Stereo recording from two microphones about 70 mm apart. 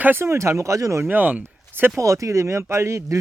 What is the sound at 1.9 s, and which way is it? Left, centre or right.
Speech, right.